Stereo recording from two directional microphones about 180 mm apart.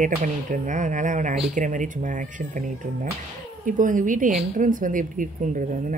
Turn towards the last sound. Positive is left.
turn(degrees=-45)  # may be behind; listen again after turning